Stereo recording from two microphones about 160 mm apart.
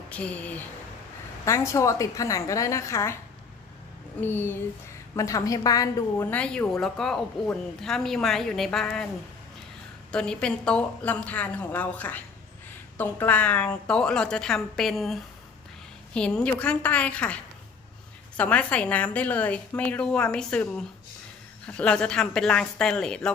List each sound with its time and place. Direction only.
0.1 s a woman's voice: 10° left (ahead or behind)
4.2 s a woman's voice: 15° left (ahead or behind)
6.3 s a woman's voice: 10° left (ahead or behind)
10.1 s a woman's voice: 5° left (ahead or behind)
21.7 s a woman's voice: 5° left (ahead or behind)